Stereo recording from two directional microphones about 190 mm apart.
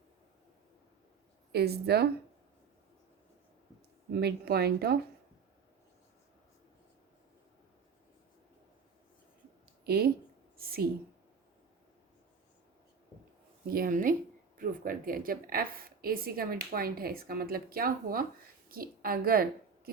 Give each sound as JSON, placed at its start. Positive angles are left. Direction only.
{"t": 1.5, "sound": "speech", "side_deg": -55}
{"t": 4.1, "sound": "speech", "side_deg": -55}
{"t": 9.8, "sound": "speech", "side_deg": -55}
{"t": 13.7, "sound": "a woman's voice", "side_deg": -50}